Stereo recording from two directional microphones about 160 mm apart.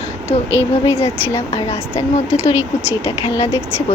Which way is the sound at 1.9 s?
15° left (ahead or behind).